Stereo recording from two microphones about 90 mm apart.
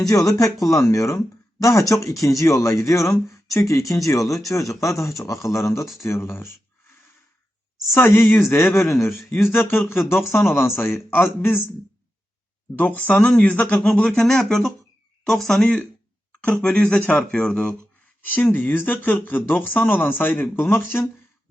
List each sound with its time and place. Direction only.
0.0 s speech: 40° left (ahead or behind)
7.9 s speech: 25° left (ahead or behind)
10.5 s speech: 5° right (ahead or behind)
10.9 s speech: 25° left (ahead or behind)
12.7 s speech: 20° left (ahead or behind)
18.3 s speech: 20° left (ahead or behind)